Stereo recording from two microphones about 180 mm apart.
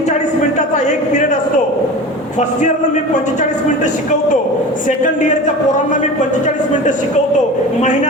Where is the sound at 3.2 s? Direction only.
40° left (ahead or behind).